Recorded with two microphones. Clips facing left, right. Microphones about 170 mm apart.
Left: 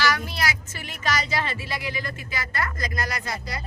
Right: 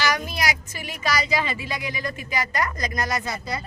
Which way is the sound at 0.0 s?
15° right (ahead or behind).